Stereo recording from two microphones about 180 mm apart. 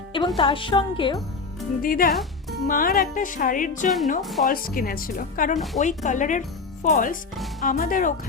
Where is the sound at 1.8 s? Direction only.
55° left (ahead or behind).